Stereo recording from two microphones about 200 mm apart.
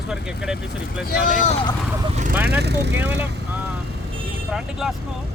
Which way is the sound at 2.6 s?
55° right (ahead or behind).